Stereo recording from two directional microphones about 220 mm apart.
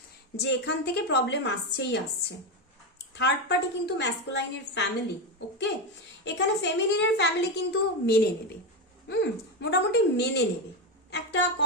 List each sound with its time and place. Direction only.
0.3 s a woman's voice: 50° left (ahead or behind)
3.2 s a woman's voice: 50° left (ahead or behind)
6.2 s a woman's voice: 55° left (ahead or behind)